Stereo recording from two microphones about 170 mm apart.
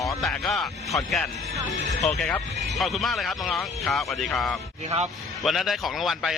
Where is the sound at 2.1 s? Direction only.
5° left (ahead or behind).